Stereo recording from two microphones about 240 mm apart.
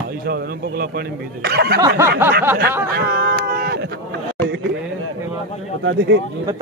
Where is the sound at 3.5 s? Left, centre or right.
Right.